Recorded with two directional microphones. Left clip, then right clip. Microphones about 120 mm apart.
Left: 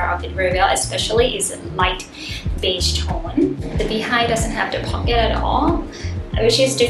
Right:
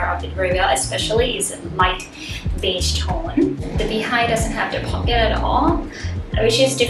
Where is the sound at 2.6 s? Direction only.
15° left (ahead or behind).